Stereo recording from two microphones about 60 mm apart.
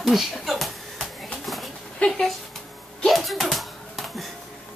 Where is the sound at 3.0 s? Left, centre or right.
Centre.